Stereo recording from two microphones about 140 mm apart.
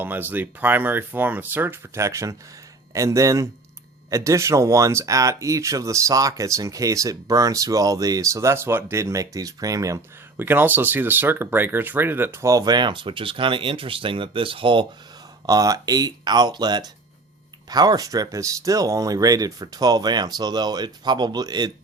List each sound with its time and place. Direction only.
0.0 s speech: 15° right (ahead or behind); by 14.8 s 35° right (ahead or behind)
15.4 s speech: 25° right (ahead or behind)